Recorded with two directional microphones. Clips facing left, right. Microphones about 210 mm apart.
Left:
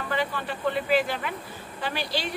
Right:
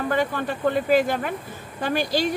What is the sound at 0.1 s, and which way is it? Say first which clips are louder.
Speech: right 1 dB; 45° right (ahead or behind).